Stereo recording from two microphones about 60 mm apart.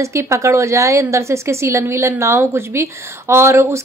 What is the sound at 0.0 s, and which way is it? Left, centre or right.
A woman's voice, right.